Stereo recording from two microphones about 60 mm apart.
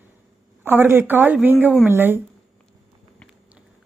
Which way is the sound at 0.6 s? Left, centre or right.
Right.